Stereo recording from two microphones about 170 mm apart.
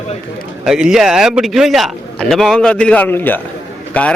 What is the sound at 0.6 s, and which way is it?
A man's voice, 5° right (ahead or behind).